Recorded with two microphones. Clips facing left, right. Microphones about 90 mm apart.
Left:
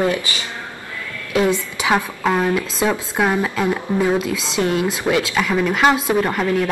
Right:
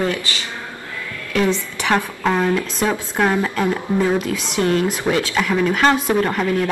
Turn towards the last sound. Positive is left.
turn(degrees=5)  # may be behind; listen again after turning